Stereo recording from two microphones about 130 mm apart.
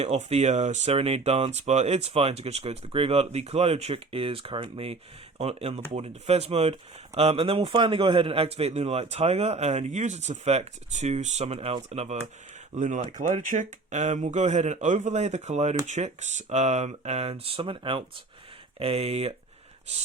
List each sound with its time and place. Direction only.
0.0 s speech: 55° right (ahead or behind)
12.7 s speech: 70° right (ahead or behind)
13.1 s speech: 40° right (ahead or behind)
13.5 s speech: 75° right (ahead or behind); by 19.3 s 50° right (ahead or behind)